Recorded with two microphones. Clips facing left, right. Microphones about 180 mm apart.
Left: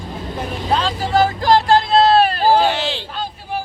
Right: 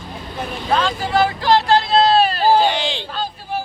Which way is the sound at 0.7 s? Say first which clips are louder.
Left 1 dB; 35° left (ahead or behind).